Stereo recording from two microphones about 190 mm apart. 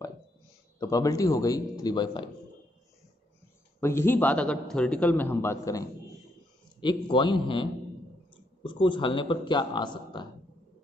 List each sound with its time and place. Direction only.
0.7 s speech: 20° left (ahead or behind)
3.8 s a man's voice: 15° left (ahead or behind)
8.6 s speech: 25° left (ahead or behind)